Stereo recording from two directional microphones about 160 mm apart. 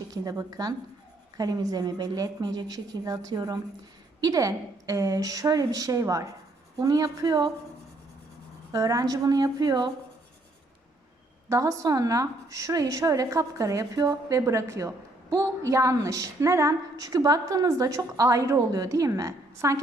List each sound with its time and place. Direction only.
0.1 s a woman's voice: 25° right (ahead or behind)
8.7 s a woman's voice: 20° right (ahead or behind)
11.4 s a woman's voice: 20° right (ahead or behind)